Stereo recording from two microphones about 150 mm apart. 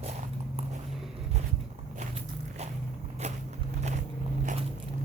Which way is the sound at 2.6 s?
45° right (ahead or behind).